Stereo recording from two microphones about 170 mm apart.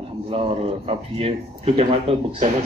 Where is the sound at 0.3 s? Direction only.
35° right (ahead or behind).